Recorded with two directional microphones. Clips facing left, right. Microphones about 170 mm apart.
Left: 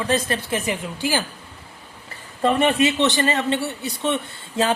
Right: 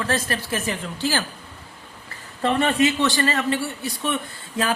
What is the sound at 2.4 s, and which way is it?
Speech, 20° left (ahead or behind).